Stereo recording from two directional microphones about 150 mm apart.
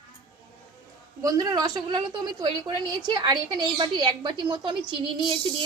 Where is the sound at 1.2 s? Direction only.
25° right (ahead or behind).